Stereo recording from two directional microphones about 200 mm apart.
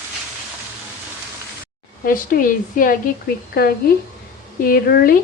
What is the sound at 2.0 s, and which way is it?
Speech, 45° left (ahead or behind).